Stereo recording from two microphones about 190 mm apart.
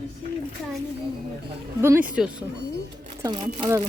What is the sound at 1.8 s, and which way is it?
Speech, 10° right (ahead or behind).